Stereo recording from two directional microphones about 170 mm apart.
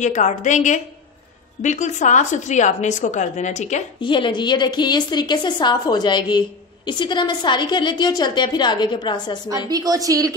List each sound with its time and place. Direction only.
0.0 s a woman's voice: 45° left (ahead or behind)
4.0 s a woman's voice: 30° left (ahead or behind)
9.7 s a woman's voice: 20° right (ahead or behind)